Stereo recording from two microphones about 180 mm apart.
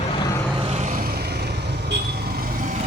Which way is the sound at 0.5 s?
35° right (ahead or behind).